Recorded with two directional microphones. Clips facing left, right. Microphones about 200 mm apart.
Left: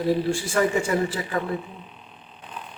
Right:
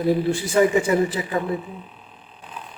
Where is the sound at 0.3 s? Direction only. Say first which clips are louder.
Right 4 dB; 20° right (ahead or behind).